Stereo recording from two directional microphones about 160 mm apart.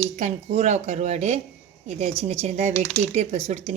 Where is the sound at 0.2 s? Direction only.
45° right (ahead or behind).